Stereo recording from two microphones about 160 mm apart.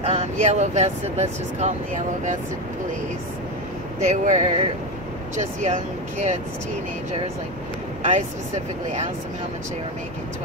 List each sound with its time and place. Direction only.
0.0 s speech: 40° right (ahead or behind)
4.1 s speech: 45° right (ahead or behind)
8.0 s speech: 45° right (ahead or behind)